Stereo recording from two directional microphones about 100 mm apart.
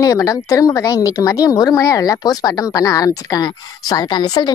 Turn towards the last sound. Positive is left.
turn(degrees=40)  # may be behind; listen again after turning